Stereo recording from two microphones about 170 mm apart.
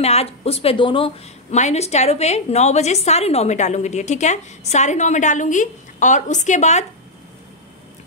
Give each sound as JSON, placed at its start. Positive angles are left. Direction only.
{"t": 0.0, "sound": "a woman's voice", "side_deg": 35}